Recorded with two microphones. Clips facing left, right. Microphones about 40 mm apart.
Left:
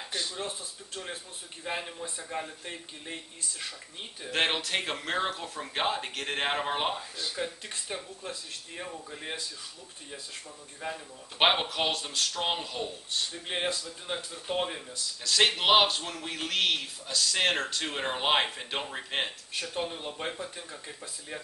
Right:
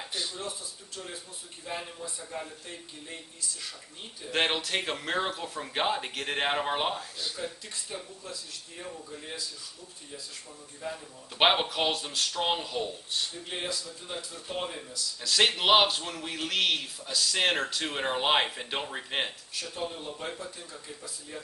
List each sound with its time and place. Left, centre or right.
0.0 s a sound: centre
0.4 s speech: left
4.3 s a man's voice: centre
7.7 s speech: left
10.8 s speech: left
11.3 s a man's voice: centre
13.3 s speech: left
15.2 s a man's voice: centre
19.5 s speech: left